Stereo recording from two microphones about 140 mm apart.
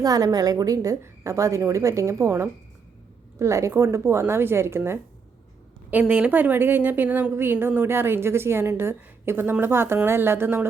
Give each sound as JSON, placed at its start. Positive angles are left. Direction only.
{"t": 0.0, "sound": "a woman's voice", "side_deg": -25}